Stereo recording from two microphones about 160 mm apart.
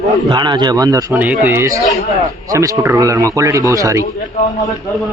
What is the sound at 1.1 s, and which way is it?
A man's voice, 10° right (ahead or behind).